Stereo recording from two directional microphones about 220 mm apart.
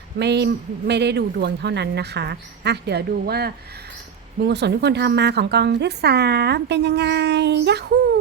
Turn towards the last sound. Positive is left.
turn(degrees=-50)  # may be behind; listen again after turning